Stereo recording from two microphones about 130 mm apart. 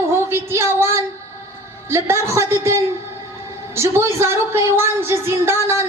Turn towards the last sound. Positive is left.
turn(degrees=-20)  # may be behind; listen again after turning